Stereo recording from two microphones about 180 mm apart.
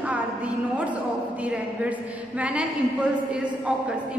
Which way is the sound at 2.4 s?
5° right (ahead or behind).